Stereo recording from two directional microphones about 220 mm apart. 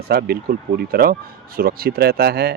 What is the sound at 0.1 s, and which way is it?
Speech, 45° right (ahead or behind).